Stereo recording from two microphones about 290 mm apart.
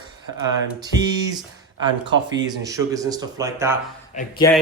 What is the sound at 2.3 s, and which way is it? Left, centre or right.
Speech, centre.